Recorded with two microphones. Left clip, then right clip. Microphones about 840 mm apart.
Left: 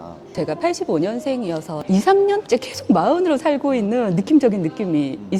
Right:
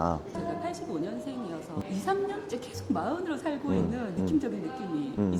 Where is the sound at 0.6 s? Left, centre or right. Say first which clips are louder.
Left 14 dB; left.